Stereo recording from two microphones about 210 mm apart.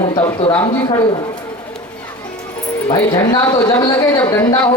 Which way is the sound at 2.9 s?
15° left (ahead or behind).